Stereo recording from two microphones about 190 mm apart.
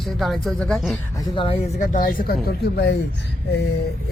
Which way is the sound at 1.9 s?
45° left (ahead or behind).